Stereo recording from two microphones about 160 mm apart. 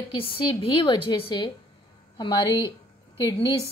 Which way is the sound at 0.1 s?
30° left (ahead or behind).